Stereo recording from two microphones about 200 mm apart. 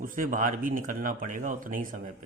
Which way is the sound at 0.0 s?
45° right (ahead or behind).